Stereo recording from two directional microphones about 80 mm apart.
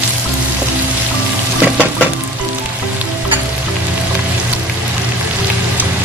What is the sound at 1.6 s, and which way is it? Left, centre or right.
Stir, centre.